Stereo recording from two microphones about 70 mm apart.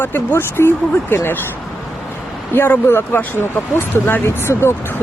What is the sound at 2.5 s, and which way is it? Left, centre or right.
Speech, left.